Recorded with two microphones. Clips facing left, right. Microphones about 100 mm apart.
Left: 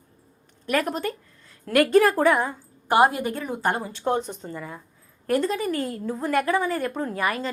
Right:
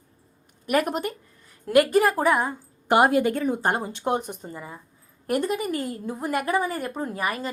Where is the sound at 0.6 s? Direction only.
15° right (ahead or behind).